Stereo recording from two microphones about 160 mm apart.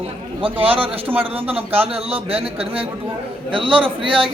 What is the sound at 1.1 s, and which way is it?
Speech, 10° right (ahead or behind).